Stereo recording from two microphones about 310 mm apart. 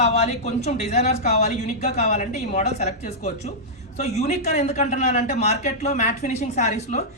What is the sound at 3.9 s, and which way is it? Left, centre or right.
Speech, left.